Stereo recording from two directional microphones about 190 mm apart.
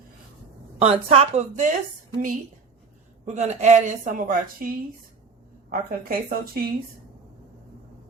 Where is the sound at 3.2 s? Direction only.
35° right (ahead or behind).